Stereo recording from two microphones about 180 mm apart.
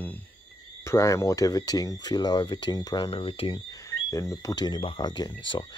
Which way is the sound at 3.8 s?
15° left (ahead or behind).